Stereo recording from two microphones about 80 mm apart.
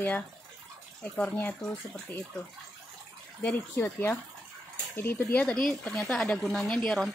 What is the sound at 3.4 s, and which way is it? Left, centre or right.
Speech, left.